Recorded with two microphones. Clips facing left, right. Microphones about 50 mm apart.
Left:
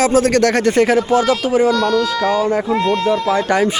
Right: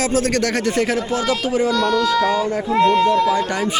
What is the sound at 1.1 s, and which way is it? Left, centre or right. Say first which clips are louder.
Speech: left 6 dB; left.